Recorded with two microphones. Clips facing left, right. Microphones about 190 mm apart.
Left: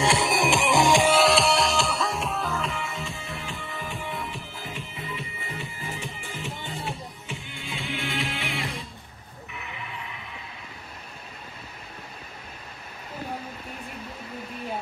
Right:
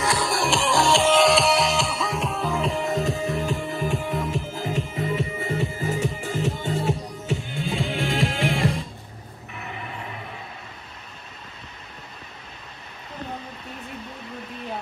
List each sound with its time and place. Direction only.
0.0 s music: 25° left (ahead or behind)
1.2 s music: centre (ahead or behind)
2.6 s music: 35° right (ahead or behind)